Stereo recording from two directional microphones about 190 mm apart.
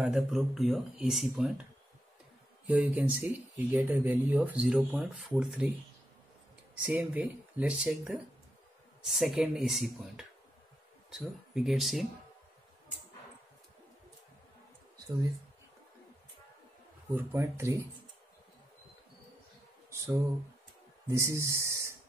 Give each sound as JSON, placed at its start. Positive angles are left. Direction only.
{"t": 0.0, "sound": "speech", "side_deg": 0}
{"t": 2.6, "sound": "speech", "side_deg": -10}
{"t": 6.8, "sound": "speech", "side_deg": -5}
{"t": 17.1, "sound": "speech", "side_deg": -10}
{"t": 19.9, "sound": "a sound", "side_deg": -15}
{"t": 21.1, "sound": "speech", "side_deg": -15}